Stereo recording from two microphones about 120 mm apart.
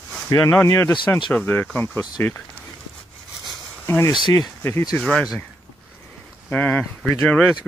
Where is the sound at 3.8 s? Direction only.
20° left (ahead or behind).